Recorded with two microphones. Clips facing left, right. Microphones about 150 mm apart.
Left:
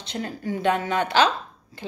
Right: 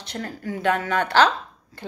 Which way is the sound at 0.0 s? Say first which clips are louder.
Left 1 dB; 20° left (ahead or behind).